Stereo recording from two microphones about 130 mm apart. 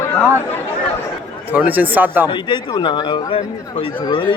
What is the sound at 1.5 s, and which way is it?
Speech, 15° right (ahead or behind).